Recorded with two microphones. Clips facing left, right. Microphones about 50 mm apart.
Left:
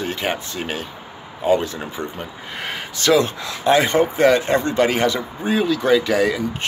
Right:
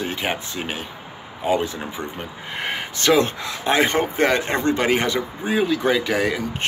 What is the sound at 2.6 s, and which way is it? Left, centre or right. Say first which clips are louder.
Speech: right 1 dB; right.